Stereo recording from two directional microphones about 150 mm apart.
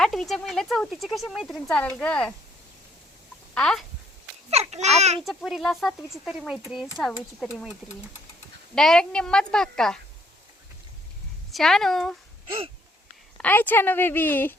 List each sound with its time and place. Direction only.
0.0 s a woman's voice: centre (ahead or behind)
3.5 s speech: 5° left (ahead or behind)
4.4 s a child's voice: 45° right (ahead or behind)
5.2 s speech: centre (ahead or behind)
11.5 s speech: centre (ahead or behind)
13.4 s a woman's voice: 10° left (ahead or behind)